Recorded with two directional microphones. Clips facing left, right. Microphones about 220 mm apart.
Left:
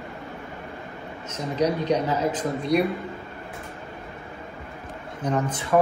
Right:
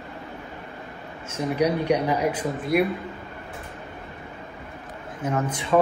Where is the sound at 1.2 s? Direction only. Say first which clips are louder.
Right 1 dB; 10° right (ahead or behind).